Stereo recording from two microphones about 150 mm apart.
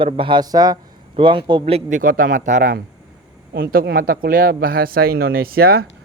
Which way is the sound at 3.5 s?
85° right.